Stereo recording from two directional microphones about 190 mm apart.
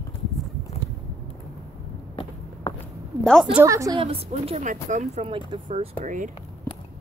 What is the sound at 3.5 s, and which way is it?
Speech, 15° right (ahead or behind).